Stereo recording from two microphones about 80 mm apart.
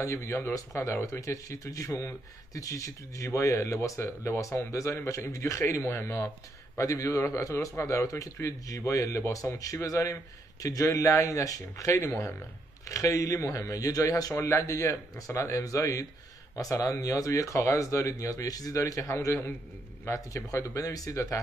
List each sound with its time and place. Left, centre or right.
0.0 s speech: left
6.8 s speech: left
14.3 s speech: left